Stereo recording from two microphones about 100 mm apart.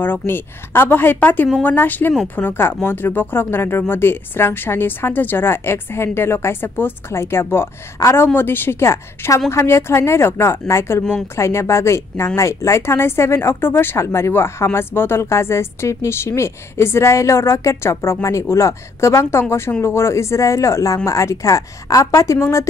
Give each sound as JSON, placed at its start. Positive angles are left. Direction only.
{"t": 0.0, "sound": "speech", "side_deg": 20}